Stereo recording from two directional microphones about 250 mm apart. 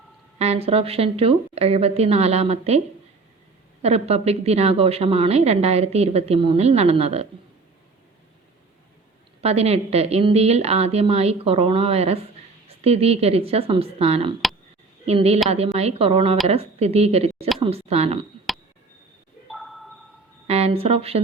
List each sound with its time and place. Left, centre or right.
0.3 s a woman's voice: right
3.8 s a woman's voice: right
9.4 s a woman's voice: right
19.5 s a sound: centre
20.5 s a woman's voice: right